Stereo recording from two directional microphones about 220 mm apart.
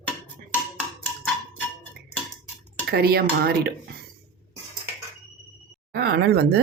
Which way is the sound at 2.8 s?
45° right (ahead or behind).